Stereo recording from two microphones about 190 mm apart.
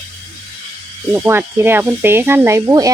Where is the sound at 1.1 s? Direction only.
10° right (ahead or behind).